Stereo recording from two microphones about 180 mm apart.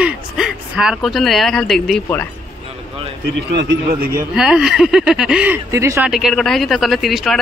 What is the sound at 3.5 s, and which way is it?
Speech, 75° right (ahead or behind).